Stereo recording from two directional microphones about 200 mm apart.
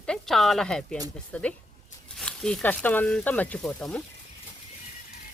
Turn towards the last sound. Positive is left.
turn(degrees=5)  # may be behind; listen again after turning